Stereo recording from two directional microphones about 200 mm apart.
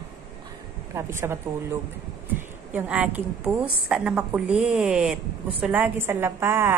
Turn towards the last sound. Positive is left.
turn(degrees=-10)  # may be behind; listen again after turning